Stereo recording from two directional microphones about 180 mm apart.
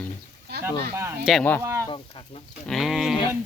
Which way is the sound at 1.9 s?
25° left (ahead or behind).